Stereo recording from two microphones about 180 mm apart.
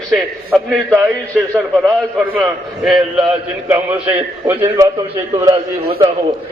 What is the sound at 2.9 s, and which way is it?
Speech, centre (ahead or behind).